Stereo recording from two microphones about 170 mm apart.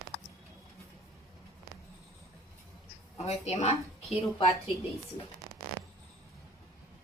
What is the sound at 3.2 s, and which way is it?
A woman's voice, 40° left (ahead or behind).